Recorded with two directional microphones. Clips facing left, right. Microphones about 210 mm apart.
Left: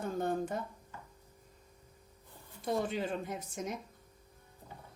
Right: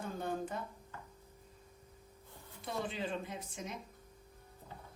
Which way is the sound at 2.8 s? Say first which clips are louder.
Left 4 dB; 45° left (ahead or behind).